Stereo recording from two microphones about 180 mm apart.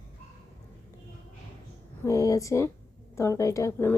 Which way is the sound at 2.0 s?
20° left (ahead or behind).